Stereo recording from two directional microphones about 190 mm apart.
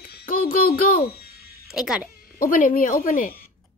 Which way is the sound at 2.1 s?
50° left (ahead or behind).